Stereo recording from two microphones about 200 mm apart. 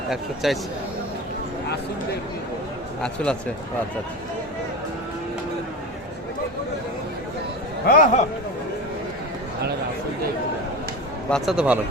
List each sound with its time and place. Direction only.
0.1 s a man's voice: centre (ahead or behind)
3.0 s a man's voice: 5° left (ahead or behind)
7.9 s speech: 40° left (ahead or behind)
11.3 s a man's voice: centre (ahead or behind)